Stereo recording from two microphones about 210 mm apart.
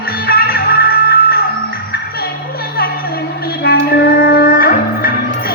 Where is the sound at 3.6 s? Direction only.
50° left (ahead or behind).